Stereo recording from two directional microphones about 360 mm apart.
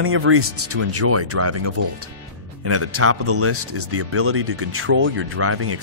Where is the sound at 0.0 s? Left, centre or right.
Right.